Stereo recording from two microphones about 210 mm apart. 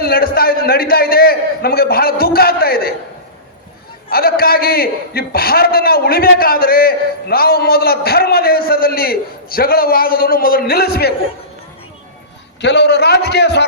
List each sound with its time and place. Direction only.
0.0 s a man's voice: 45° left (ahead or behind)
4.1 s a man's voice: 45° left (ahead or behind)
12.6 s a man's voice: 55° left (ahead or behind)